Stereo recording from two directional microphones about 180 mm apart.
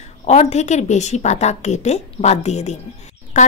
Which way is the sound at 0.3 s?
40° left (ahead or behind).